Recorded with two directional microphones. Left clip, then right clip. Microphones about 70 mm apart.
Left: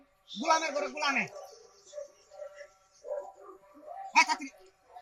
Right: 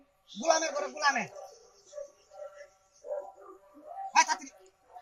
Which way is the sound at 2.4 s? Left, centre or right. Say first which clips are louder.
Even; centre.